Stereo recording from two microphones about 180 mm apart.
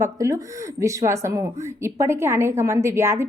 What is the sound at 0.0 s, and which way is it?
A woman's voice, 15° right (ahead or behind).